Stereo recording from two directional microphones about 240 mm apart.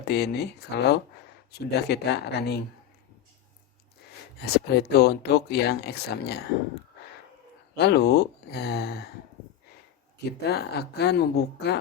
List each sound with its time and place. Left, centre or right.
0.1 s speech: left
4.4 s speech: left
7.8 s speech: left
10.4 s speech: left